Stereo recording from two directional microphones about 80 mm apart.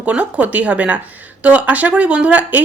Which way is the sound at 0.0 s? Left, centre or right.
Centre.